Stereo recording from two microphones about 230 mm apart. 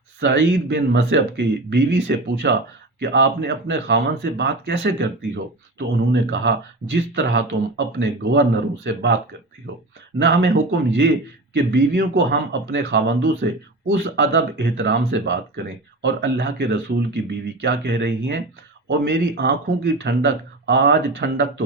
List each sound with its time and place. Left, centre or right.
0.2 s speech: right
10.2 s speech: right